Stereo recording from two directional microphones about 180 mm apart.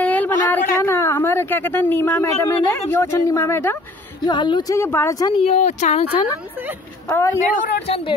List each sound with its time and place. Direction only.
0.0 s a sound: 10° left (ahead or behind)
0.8 s a woman's voice: 15° left (ahead or behind)
4.2 s speech: 25° left (ahead or behind)
5.4 s a woman's voice: 40° left (ahead or behind)
7.1 s speech: 15° left (ahead or behind)
7.5 s a woman's voice: 45° left (ahead or behind)